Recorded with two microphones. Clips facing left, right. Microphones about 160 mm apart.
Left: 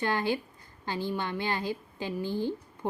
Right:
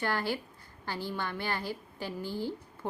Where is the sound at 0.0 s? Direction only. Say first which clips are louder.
Left 3 dB; 20° left (ahead or behind).